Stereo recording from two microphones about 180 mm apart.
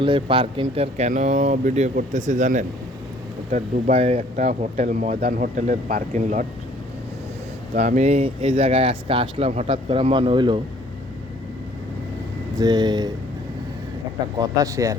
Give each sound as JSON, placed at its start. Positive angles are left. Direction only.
{"t": 0.0, "sound": "speech", "side_deg": -30}
{"t": 7.8, "sound": "speech", "side_deg": -40}
{"t": 12.5, "sound": "speech", "side_deg": -25}
{"t": 14.3, "sound": "speech", "side_deg": -20}